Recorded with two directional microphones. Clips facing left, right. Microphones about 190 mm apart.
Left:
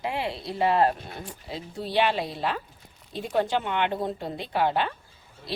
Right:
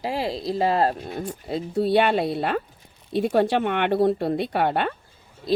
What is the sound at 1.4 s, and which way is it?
Speech, 55° right (ahead or behind).